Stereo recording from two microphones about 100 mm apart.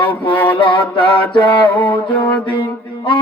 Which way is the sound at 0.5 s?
55° left (ahead or behind).